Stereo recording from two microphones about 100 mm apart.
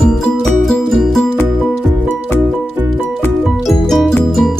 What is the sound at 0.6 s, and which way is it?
Music, centre (ahead or behind).